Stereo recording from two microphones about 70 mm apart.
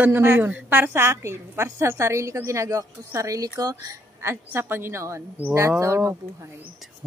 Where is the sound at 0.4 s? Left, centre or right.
Right.